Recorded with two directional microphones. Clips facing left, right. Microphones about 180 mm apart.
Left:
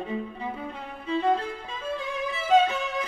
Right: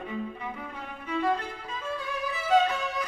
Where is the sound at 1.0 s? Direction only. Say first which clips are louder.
Left 3 dB; 25° left (ahead or behind).